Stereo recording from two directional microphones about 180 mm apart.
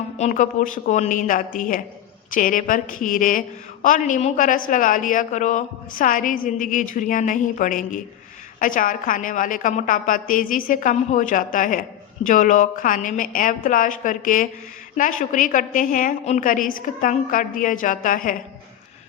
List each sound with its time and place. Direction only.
0.2 s a woman's voice: 45° left (ahead or behind)